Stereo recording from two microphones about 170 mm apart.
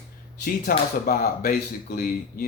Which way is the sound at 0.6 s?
60° left (ahead or behind).